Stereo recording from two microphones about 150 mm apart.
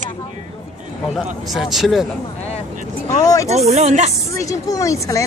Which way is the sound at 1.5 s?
Centre (ahead or behind).